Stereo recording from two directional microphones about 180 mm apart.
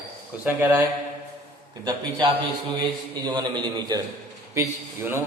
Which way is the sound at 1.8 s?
25° right (ahead or behind).